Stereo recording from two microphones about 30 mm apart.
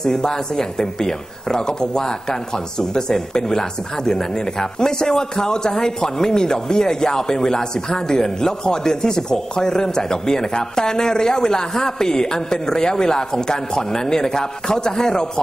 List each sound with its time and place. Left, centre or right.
0.0 s speech: centre